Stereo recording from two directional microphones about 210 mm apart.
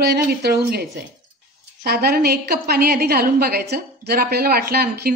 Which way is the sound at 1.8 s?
45° right (ahead or behind).